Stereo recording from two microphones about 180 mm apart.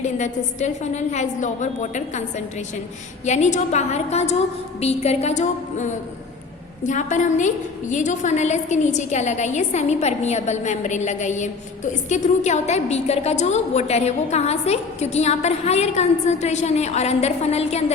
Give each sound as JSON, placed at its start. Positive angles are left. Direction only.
{"t": 0.0, "sound": "a woman's voice", "side_deg": 40}